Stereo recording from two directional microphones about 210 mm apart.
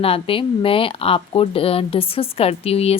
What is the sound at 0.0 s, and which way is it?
Speech, 25° left (ahead or behind).